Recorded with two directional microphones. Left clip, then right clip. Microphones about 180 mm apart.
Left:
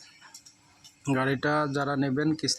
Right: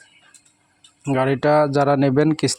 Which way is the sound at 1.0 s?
30° right (ahead or behind).